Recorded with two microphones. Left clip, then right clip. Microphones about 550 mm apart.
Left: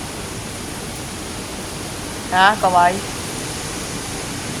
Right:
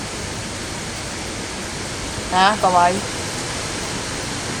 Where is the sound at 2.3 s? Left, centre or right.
Left.